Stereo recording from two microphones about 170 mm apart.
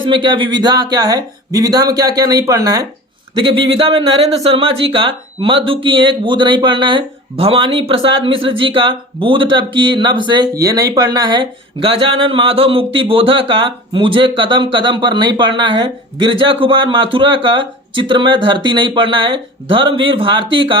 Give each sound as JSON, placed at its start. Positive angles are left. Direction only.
{"t": 0.0, "sound": "speech", "side_deg": -30}